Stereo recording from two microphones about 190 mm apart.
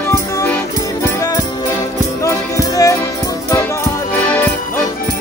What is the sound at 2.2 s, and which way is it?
Music, 15° left (ahead or behind).